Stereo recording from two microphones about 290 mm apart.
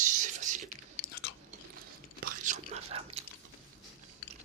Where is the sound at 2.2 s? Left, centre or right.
Right.